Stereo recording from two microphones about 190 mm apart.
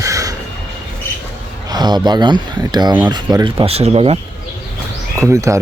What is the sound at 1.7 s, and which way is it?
Speech, 20° right (ahead or behind).